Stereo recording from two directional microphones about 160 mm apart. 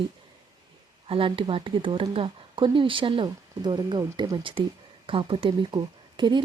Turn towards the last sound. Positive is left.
turn(degrees=-30)  # may be behind; listen again after turning